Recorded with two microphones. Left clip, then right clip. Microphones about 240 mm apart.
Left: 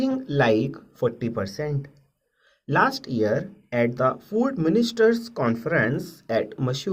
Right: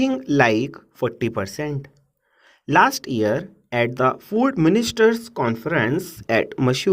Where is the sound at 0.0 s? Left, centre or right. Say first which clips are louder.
Right 4 dB; right.